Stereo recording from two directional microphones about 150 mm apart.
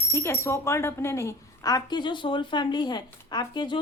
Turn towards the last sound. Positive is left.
turn(degrees=30)  # may be behind; listen again after turning